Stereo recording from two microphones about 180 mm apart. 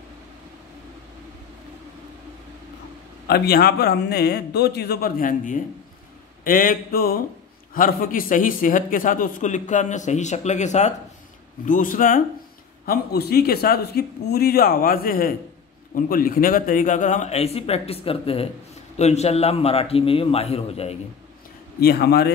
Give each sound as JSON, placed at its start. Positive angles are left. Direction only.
{"t": 3.3, "sound": "a man's voice", "side_deg": 60}
{"t": 21.7, "sound": "speech", "side_deg": 60}